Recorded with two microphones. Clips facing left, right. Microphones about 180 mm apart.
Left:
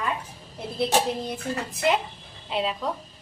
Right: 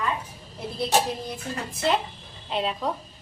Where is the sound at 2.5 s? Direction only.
Centre (ahead or behind).